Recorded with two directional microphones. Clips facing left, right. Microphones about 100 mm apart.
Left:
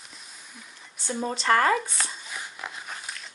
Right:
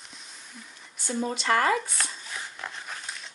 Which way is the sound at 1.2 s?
35° left (ahead or behind).